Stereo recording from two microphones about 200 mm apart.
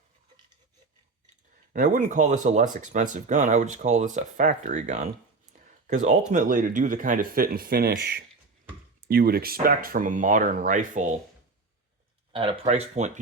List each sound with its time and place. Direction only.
1.7 s speech: 40° right (ahead or behind)
6.1 s speech: 40° right (ahead or behind)
12.3 s speech: 25° right (ahead or behind)